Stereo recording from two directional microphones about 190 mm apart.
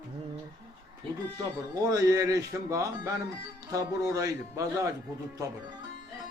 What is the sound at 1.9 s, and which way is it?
A man's voice, 15° right (ahead or behind).